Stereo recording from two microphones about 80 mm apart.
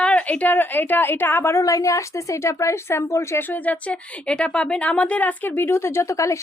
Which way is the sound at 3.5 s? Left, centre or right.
Centre.